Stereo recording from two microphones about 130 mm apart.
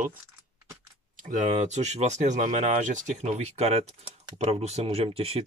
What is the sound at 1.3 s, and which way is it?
Speech, 65° right (ahead or behind).